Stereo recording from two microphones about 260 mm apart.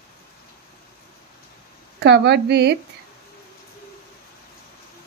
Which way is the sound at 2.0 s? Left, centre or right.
Right.